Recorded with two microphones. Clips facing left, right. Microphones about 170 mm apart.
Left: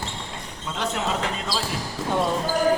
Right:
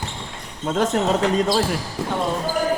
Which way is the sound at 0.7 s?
45° right (ahead or behind).